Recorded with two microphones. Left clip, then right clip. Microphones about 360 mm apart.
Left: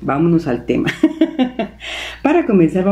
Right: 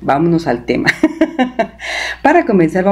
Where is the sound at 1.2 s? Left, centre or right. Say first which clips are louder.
Right 3 dB; centre.